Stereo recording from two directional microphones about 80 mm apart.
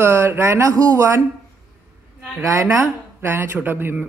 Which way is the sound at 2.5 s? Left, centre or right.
Right.